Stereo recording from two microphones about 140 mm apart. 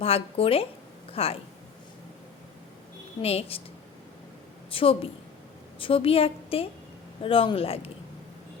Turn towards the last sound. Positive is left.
turn(degrees=45)  # may be behind; listen again after turning